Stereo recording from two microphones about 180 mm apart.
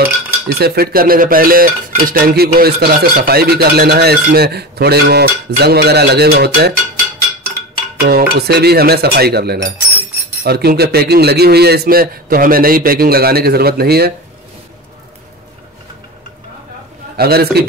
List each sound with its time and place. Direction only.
0.0 s dishes: 60° right (ahead or behind)
8.0 s dishes: 60° right (ahead or behind)
17.2 s dishes: 60° right (ahead or behind)